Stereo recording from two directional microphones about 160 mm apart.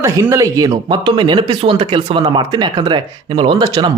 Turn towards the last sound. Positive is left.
turn(degrees=-30)  # may be behind; listen again after turning